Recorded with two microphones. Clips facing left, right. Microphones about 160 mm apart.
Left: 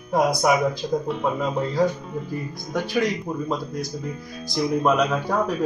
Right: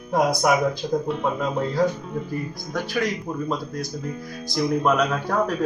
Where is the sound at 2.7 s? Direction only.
20° left (ahead or behind).